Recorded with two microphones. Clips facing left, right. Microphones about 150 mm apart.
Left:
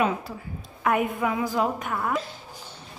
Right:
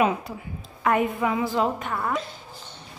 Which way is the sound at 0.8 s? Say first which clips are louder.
Right 1 dB; centre (ahead or behind).